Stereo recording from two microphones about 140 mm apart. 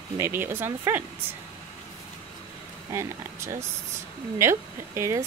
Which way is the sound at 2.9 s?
20° right (ahead or behind).